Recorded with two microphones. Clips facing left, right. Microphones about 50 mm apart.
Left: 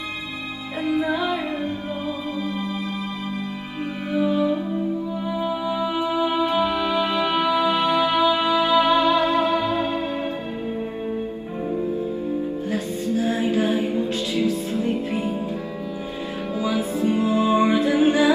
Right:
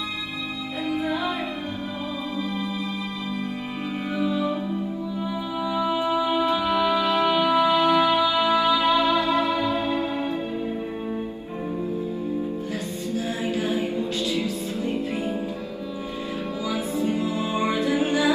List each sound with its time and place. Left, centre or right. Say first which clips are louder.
0.8 s music: left 4 dB; left
4.2 s music: left 5 dB; left
12.7 s music: left 5 dB; left
16.6 s music: left 4 dB; left